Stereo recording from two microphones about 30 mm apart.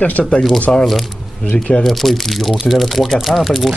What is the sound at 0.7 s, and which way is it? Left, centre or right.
Speech, left.